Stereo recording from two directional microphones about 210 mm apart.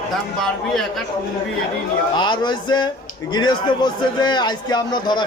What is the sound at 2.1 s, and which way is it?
A man's voice, 20° left (ahead or behind).